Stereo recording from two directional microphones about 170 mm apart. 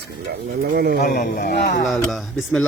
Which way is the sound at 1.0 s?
65° left (ahead or behind).